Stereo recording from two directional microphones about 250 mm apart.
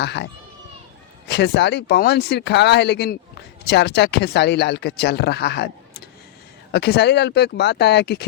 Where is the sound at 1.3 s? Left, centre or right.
Left.